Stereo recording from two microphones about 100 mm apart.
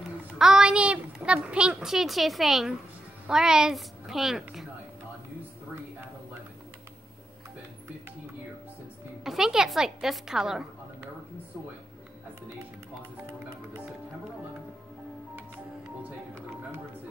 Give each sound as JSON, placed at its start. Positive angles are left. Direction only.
{"t": 0.4, "sound": "a child's voice", "side_deg": -5}
{"t": 9.2, "sound": "a woman's voice", "side_deg": -5}
{"t": 16.0, "sound": "music", "side_deg": -25}